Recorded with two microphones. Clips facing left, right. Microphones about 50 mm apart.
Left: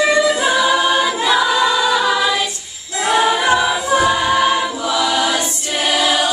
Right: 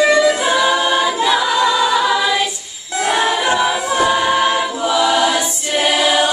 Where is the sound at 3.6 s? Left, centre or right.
Centre.